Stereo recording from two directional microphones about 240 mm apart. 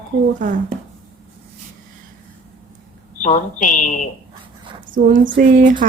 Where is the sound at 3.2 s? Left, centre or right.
Left.